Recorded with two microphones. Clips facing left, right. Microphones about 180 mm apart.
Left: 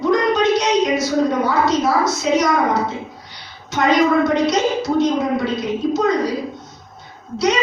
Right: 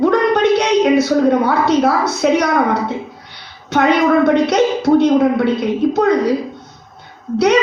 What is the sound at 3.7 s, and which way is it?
A woman's voice, 60° right (ahead or behind).